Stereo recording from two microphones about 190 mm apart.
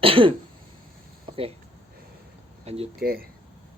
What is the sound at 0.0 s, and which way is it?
Throat clearing, 25° right (ahead or behind).